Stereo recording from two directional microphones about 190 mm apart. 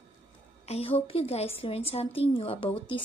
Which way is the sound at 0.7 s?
30° left (ahead or behind).